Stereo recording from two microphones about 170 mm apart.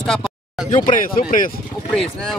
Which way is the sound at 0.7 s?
50° left (ahead or behind).